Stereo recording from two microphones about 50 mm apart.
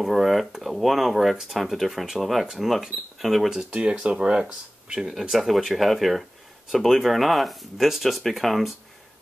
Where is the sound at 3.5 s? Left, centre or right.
Centre.